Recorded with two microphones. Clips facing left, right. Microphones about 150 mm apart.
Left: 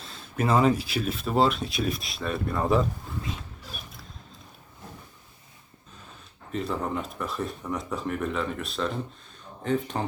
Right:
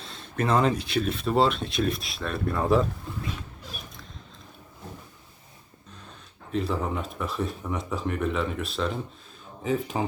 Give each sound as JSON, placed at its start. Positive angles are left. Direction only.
{"t": 0.0, "sound": "speech", "side_deg": 0}
{"t": 6.5, "sound": "speech", "side_deg": 0}